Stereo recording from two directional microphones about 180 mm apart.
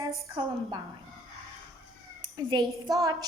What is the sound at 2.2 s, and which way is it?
Speech, 25° right (ahead or behind).